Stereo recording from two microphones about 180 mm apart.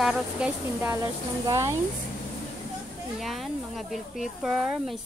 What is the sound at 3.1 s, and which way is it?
Speech, centre (ahead or behind).